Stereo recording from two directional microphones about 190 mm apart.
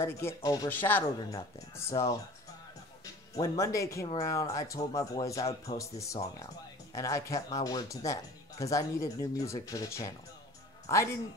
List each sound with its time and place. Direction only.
0.0 s speech: 15° left (ahead or behind)
3.3 s speech: 15° left (ahead or behind)